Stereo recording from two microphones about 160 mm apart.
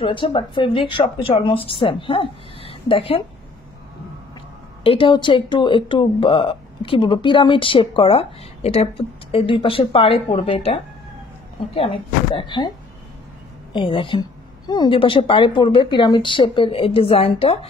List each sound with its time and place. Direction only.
0.0 s speech: 30° left (ahead or behind)
4.8 s speech: 30° left (ahead or behind)
13.7 s speech: 30° left (ahead or behind)